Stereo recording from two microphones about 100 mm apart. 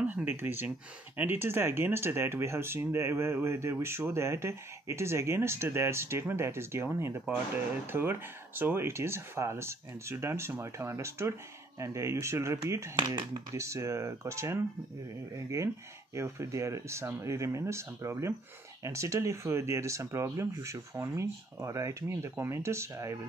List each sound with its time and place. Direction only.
0.0 s speech: 20° right (ahead or behind)
13.0 s speech: 55° right (ahead or behind)
13.6 s speech: 30° right (ahead or behind)
16.2 s speech: 30° right (ahead or behind)